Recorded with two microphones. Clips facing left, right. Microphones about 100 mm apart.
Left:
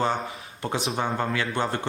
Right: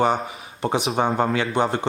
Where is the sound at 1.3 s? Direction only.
20° right (ahead or behind).